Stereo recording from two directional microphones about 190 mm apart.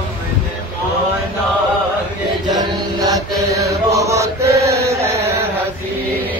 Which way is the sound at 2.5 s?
20° right (ahead or behind).